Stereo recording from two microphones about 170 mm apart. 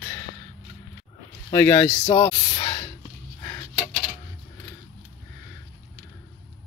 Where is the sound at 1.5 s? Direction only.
15° left (ahead or behind).